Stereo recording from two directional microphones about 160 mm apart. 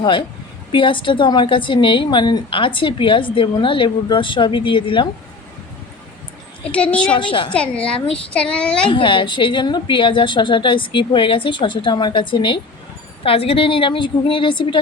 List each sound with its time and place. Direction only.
0.0 s a woman's voice: 30° left (ahead or behind)
6.7 s speech: 10° left (ahead or behind)
7.2 s a woman's voice: 30° left (ahead or behind)
7.5 s speech: 5° left (ahead or behind)
8.9 s a woman's voice: 30° left (ahead or behind)